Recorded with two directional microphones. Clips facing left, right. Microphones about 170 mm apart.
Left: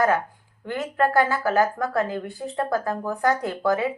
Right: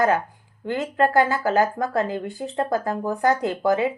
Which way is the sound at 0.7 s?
20° right (ahead or behind).